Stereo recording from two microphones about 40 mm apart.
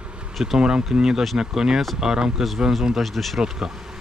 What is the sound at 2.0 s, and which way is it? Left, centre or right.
Speech, centre.